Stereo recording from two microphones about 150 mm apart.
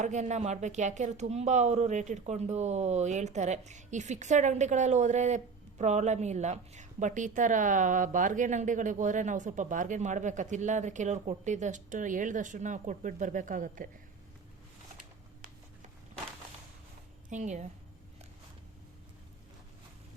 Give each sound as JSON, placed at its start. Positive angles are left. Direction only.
{"t": 0.0, "sound": "speech", "side_deg": -50}
{"t": 17.2, "sound": "a woman's voice", "side_deg": -50}